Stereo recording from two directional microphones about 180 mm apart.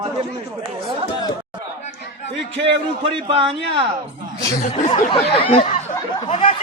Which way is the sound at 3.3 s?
30° right (ahead or behind).